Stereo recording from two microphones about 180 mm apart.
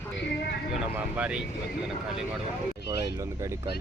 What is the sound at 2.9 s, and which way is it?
Speech, 15° right (ahead or behind).